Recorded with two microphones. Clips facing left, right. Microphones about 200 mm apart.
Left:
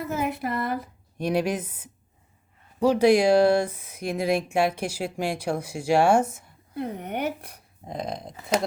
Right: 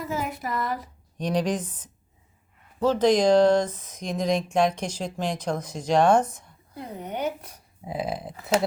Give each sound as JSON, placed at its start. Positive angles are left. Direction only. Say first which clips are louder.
{"t": 0.0, "sound": "a woman's voice", "louder": "left 2 dB", "side_deg": 60}
{"t": 1.2, "sound": "speech", "louder": "left 1 dB", "side_deg": 10}
{"t": 6.7, "sound": "a woman's voice", "louder": "left 3 dB", "side_deg": 60}
{"t": 7.9, "sound": "speech", "louder": "right 2 dB", "side_deg": -5}